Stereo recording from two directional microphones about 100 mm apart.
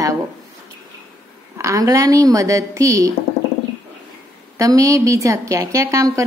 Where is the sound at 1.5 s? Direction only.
30° right (ahead or behind).